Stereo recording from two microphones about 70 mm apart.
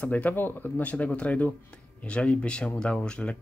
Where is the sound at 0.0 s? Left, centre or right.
Left.